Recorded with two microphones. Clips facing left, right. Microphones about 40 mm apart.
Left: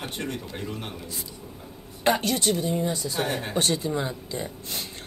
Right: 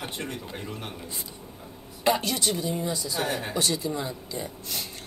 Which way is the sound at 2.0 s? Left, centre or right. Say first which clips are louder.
Left 2 dB; left.